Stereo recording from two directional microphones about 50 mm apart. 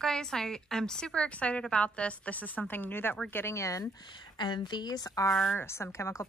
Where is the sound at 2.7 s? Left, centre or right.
Left.